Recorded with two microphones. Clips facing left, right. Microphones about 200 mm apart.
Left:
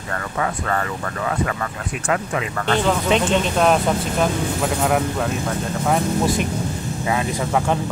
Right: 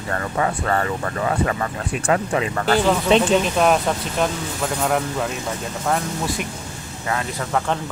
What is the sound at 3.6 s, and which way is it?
Speech, centre (ahead or behind).